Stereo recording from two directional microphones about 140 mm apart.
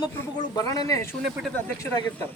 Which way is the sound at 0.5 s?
25° left (ahead or behind).